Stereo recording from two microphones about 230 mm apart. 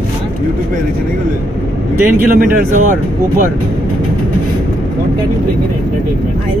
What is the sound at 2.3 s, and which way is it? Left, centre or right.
Speech, right.